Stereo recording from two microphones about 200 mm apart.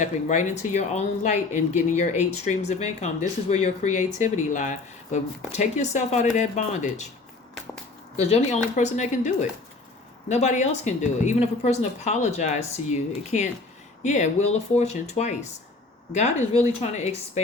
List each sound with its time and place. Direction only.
0.0 s speech: 35° left (ahead or behind)
8.1 s speech: 30° left (ahead or behind)